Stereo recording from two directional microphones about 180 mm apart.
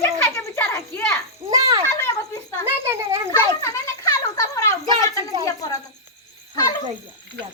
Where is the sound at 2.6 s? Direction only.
15° right (ahead or behind).